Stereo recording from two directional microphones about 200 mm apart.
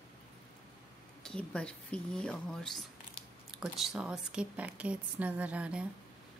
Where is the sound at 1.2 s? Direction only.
5° left (ahead or behind).